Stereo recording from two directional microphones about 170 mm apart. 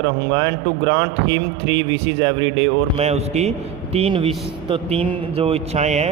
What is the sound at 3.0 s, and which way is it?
Speech, 40° right (ahead or behind).